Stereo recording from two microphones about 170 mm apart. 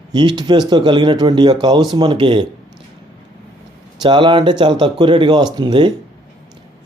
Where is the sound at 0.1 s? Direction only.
25° right (ahead or behind).